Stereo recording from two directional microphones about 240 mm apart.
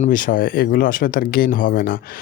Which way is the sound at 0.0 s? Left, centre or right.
Left.